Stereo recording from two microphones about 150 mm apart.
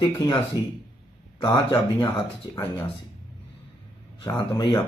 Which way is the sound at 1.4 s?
25° left (ahead or behind).